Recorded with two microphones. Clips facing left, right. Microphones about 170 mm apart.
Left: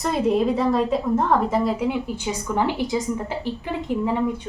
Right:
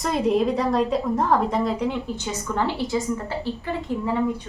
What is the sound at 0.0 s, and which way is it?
A woman's voice, centre (ahead or behind).